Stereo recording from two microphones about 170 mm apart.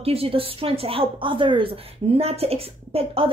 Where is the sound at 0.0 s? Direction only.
35° right (ahead or behind).